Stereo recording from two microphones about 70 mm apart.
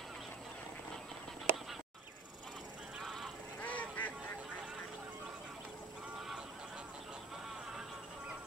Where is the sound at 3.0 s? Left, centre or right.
Centre.